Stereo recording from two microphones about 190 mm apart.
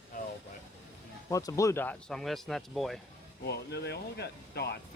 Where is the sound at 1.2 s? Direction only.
15° left (ahead or behind); by 3.0 s centre (ahead or behind).